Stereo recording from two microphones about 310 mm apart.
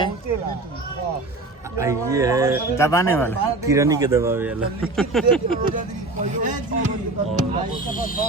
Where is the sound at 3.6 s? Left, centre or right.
Centre.